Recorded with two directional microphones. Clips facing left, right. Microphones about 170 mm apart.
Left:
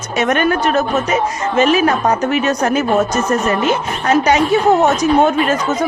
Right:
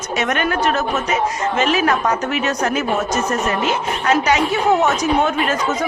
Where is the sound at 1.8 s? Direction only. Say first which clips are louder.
Left 3 dB; 35° left (ahead or behind).